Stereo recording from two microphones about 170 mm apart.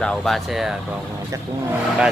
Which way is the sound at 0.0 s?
Centre (ahead or behind).